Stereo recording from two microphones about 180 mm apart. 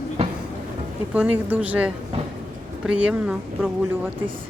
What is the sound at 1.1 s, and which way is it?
Speech, 10° right (ahead or behind).